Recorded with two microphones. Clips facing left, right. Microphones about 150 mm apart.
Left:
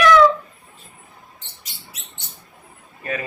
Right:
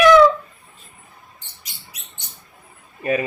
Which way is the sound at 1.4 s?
10° right (ahead or behind).